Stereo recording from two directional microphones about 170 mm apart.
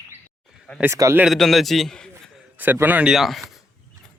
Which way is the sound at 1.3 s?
Centre (ahead or behind).